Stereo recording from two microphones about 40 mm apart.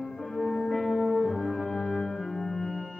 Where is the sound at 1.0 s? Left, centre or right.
Centre.